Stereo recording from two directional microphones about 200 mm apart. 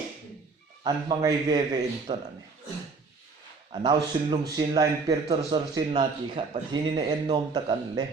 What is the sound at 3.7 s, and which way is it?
Speech, 20° right (ahead or behind).